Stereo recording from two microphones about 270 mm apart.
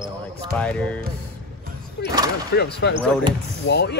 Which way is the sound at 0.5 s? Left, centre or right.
Centre.